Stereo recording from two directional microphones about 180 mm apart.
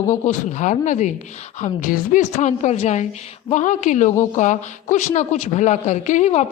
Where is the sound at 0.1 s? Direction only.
40° left (ahead or behind).